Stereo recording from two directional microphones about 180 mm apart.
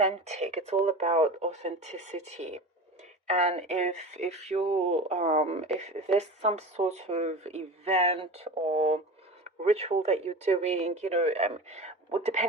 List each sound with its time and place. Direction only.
0.0 s speech: 35° right (ahead or behind)